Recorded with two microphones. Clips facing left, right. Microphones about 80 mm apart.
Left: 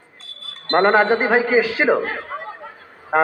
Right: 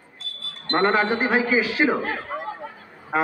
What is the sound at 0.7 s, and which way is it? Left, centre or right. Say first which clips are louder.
Speech: left 5 dB; left.